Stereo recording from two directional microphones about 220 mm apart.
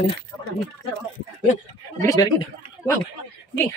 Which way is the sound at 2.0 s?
15° left (ahead or behind).